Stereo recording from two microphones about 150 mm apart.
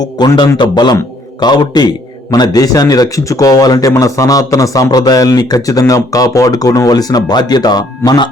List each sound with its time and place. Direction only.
0.0 s a man's voice: 30° left (ahead or behind)